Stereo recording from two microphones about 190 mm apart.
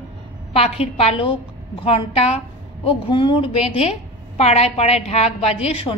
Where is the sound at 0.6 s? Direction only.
35° left (ahead or behind).